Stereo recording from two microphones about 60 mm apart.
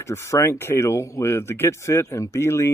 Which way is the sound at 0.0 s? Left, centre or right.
Left.